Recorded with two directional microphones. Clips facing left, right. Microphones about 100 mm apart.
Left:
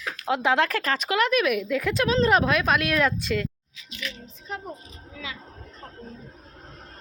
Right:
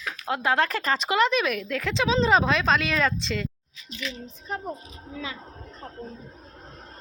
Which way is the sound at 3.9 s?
30° right (ahead or behind).